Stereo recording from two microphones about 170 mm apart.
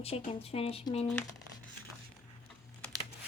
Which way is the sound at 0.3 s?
35° left (ahead or behind).